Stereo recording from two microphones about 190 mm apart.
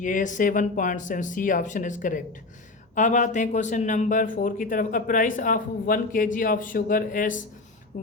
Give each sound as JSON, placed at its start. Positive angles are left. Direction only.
{"t": 0.0, "sound": "speech", "side_deg": 40}